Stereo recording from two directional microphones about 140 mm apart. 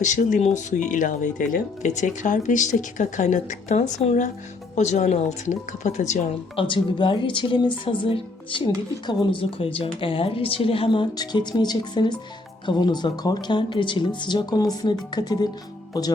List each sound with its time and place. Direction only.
0.0 s speech: 60° left (ahead or behind)
6.6 s speech: 35° left (ahead or behind)